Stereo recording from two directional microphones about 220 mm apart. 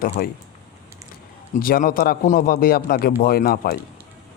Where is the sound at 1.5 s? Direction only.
40° left (ahead or behind).